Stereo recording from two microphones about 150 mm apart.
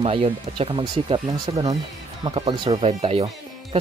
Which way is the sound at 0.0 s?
40° right (ahead or behind).